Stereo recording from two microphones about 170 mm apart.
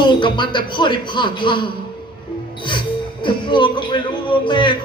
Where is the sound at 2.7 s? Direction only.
30° left (ahead or behind).